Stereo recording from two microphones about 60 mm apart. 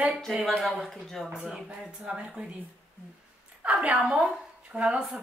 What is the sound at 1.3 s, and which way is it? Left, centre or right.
Speech, centre.